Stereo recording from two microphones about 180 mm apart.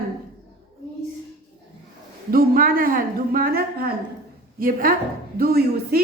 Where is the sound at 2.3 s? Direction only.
50° right (ahead or behind).